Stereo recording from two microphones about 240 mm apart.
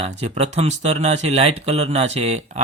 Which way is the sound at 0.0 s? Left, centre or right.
Right.